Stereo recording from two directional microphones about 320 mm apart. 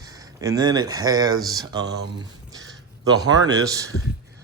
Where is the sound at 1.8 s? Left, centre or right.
Right.